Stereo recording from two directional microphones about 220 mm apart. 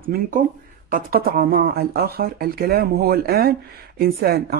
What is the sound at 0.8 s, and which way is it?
A woman's voice, 40° right (ahead or behind).